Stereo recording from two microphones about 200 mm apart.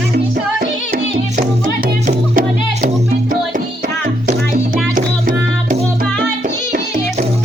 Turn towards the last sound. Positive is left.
turn(degrees=-40)  # may be behind; listen again after turning